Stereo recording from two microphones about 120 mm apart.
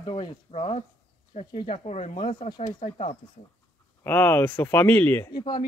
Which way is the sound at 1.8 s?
70° left (ahead or behind).